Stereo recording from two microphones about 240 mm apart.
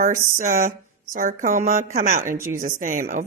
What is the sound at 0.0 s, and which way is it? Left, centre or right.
A woman's voice, right.